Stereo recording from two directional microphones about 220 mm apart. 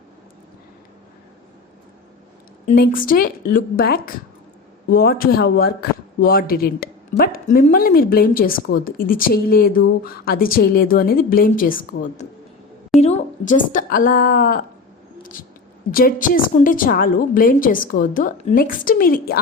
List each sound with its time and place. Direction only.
2.7 s a man's voice: 40° left (ahead or behind)
15.9 s speech: 40° left (ahead or behind)